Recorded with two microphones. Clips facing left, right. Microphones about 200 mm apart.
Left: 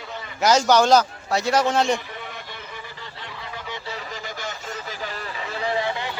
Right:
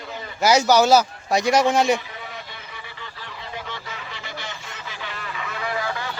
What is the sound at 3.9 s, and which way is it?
Telephone, 40° left (ahead or behind).